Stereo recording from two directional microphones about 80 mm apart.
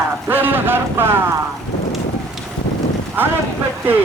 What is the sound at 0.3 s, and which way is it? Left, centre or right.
Speech, right.